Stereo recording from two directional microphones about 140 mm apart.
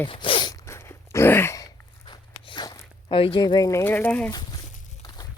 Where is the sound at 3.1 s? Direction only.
40° left (ahead or behind).